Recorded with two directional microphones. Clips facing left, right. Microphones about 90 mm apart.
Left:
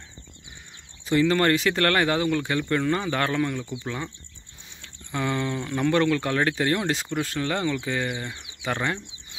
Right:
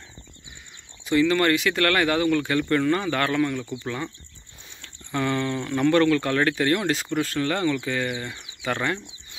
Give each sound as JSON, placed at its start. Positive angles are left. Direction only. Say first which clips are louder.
{"t": 1.0, "sound": "speech", "louder": "right 1 dB", "side_deg": 35}